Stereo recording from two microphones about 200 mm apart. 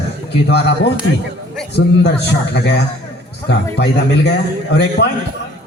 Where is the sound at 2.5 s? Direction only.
55° left (ahead or behind).